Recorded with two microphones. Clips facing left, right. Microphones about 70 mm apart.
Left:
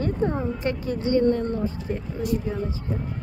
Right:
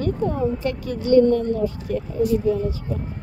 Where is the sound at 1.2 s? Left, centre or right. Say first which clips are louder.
Right 3 dB; left.